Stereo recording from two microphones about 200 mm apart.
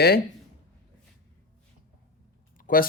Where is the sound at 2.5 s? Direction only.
45° left (ahead or behind).